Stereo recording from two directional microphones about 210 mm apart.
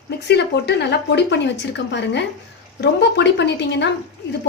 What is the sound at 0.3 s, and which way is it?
Speech, 55° left (ahead or behind).